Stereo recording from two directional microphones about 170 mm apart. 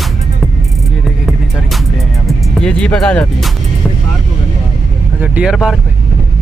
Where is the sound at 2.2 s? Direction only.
5° left (ahead or behind).